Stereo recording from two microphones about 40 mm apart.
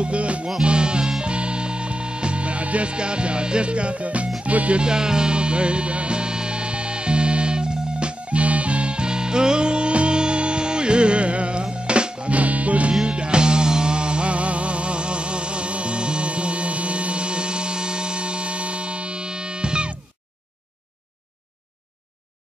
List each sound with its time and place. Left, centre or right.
0.0 s music: right
4.8 s music: centre; by 12.9 s right
13.0 s music: right